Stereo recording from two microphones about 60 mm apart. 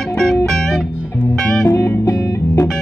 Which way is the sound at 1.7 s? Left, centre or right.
Left.